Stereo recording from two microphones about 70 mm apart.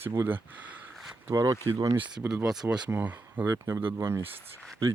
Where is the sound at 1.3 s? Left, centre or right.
Right.